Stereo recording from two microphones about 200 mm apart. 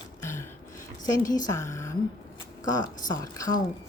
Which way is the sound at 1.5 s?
15° left (ahead or behind).